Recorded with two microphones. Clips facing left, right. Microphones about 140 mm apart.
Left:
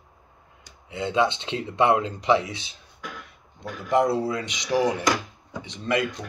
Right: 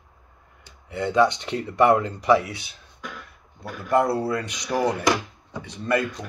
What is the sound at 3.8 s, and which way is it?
Speech, 20° left (ahead or behind).